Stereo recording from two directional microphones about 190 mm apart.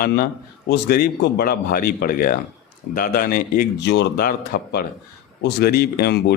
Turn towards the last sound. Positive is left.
turn(degrees=60)  # may be behind; listen again after turning